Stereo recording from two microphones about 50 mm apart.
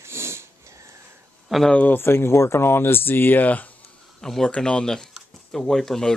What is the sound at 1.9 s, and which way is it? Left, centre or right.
Speech, left.